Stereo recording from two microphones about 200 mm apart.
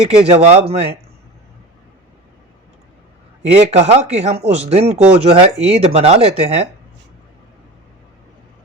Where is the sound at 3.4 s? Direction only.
35° right (ahead or behind).